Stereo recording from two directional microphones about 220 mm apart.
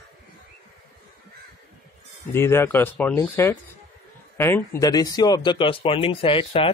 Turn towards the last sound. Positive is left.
turn(degrees=25)  # may be behind; listen again after turning